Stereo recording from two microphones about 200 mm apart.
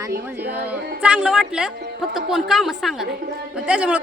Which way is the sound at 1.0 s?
5° right (ahead or behind).